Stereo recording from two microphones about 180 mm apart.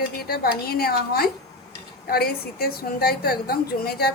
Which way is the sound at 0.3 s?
60° left (ahead or behind).